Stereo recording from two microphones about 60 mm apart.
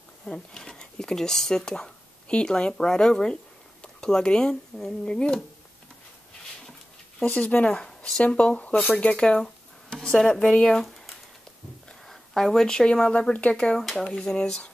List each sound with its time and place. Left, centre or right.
0.2 s speech: centre
7.2 s speech: left
7.7 s speech: centre
13.7 s speech: centre